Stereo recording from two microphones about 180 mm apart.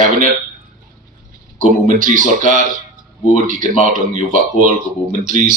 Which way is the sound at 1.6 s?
45° right (ahead or behind).